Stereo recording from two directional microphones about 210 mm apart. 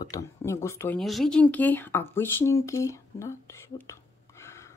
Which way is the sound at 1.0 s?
Centre (ahead or behind).